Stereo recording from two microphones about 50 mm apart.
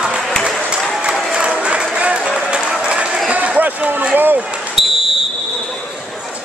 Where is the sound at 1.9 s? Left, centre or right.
Right.